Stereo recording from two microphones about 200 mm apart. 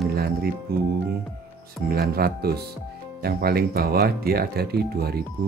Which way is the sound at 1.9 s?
50° right (ahead or behind).